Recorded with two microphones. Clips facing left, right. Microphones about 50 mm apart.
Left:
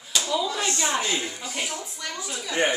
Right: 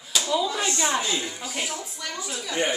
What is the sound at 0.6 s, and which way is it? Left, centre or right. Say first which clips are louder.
Speech: right 1 dB; right.